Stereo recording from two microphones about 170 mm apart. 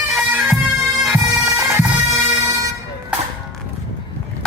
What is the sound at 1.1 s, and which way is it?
Bagpipes, 15° right (ahead or behind).